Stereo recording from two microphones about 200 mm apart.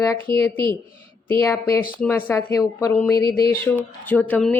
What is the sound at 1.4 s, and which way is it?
Speech, 15° left (ahead or behind).